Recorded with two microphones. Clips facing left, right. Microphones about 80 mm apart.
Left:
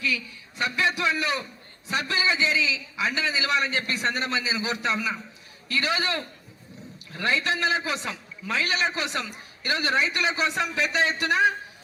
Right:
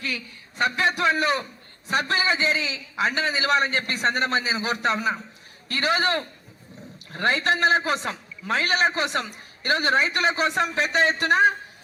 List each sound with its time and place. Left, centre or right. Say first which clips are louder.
0.0 s a man's voice: left 3 dB; right